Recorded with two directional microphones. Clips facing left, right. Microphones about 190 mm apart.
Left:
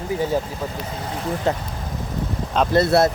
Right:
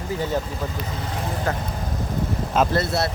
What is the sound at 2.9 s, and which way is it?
Speech, 60° left (ahead or behind).